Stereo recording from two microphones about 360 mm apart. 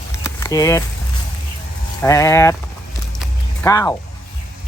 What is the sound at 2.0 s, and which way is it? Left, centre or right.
Speech, centre.